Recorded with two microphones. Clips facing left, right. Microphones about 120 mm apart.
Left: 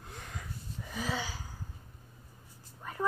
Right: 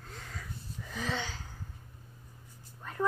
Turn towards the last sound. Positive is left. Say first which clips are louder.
# right 2 dB
turn(degrees=10)  # may be behind; listen again after turning